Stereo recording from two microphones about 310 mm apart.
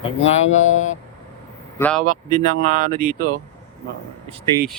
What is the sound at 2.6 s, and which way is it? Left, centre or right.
Speech, right.